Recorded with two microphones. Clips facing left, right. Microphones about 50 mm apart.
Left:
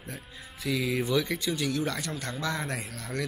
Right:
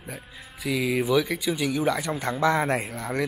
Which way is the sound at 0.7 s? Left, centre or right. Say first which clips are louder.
Right 4 dB; centre.